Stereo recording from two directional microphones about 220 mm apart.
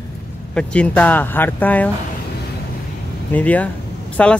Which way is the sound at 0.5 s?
5° left (ahead or behind).